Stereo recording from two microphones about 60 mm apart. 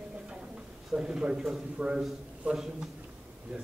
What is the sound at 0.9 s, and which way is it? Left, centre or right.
Speech, centre.